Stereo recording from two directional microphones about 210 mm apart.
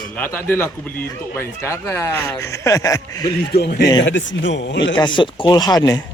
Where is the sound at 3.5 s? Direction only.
50° left (ahead or behind).